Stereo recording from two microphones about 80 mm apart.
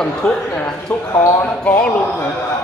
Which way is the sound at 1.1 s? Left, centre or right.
Left.